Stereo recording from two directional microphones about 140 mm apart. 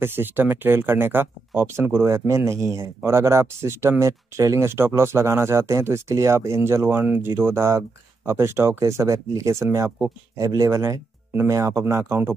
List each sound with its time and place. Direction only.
0.0 s speech: 15° right (ahead or behind)